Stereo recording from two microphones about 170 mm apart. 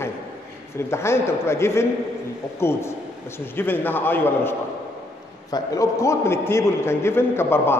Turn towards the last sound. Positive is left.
turn(degrees=15)  # may be behind; listen again after turning